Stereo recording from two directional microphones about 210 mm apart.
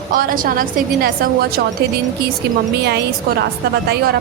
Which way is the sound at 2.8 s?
50° right (ahead or behind).